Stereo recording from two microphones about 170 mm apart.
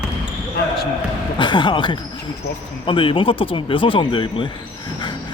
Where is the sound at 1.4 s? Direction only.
25° left (ahead or behind).